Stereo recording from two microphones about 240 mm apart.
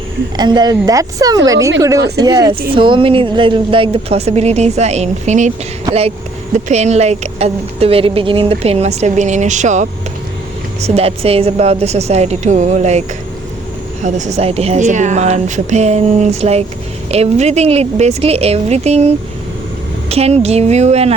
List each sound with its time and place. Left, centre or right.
0.3 s a woman's voice: centre